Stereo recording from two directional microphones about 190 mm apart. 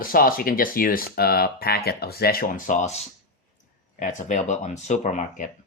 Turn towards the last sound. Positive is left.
turn(degrees=40)  # may be behind; listen again after turning